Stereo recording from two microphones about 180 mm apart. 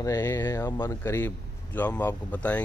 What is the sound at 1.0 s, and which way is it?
Speech, 10° left (ahead or behind).